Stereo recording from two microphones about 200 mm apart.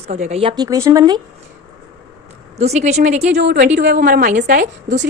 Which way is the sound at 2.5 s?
35° right (ahead or behind).